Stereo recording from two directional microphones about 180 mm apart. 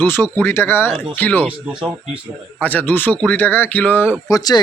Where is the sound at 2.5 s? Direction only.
10° left (ahead or behind).